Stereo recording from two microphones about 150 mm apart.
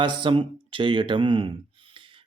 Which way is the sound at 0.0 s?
35° right (ahead or behind).